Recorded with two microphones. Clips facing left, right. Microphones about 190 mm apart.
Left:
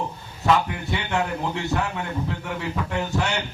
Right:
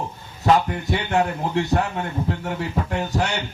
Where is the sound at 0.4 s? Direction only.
40° right (ahead or behind).